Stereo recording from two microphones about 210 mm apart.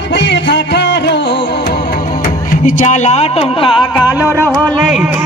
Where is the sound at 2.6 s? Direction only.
35° left (ahead or behind).